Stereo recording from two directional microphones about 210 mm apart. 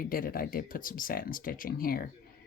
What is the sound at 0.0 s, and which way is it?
Speech, 40° left (ahead or behind).